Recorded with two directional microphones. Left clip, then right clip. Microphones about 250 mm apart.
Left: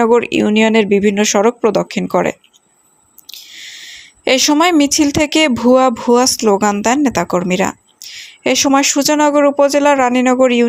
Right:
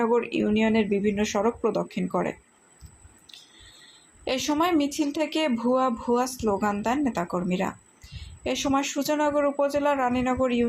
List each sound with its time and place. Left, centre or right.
0.0 s speech: left
3.3 s squish: left
4.3 s speech: left